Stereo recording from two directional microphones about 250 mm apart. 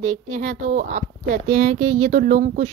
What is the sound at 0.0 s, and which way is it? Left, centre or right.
A woman's voice, right.